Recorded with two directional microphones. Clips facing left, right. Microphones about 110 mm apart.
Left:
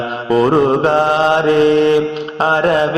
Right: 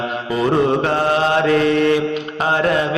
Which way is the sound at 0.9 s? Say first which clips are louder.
Left 4 dB; 30° left (ahead or behind).